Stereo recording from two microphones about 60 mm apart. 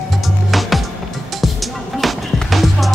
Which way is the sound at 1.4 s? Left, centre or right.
Centre.